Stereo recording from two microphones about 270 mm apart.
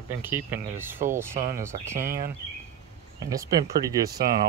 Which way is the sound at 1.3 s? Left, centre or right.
Right.